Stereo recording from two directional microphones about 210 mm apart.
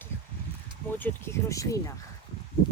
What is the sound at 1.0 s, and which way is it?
Speech, 15° left (ahead or behind).